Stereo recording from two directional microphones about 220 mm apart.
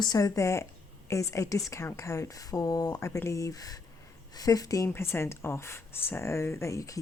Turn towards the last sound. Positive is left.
turn(degrees=15)  # may be behind; listen again after turning